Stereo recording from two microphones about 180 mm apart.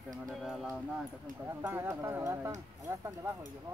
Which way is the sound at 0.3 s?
Centre (ahead or behind).